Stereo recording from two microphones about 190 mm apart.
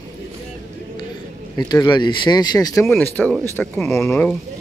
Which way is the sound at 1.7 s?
20° left (ahead or behind).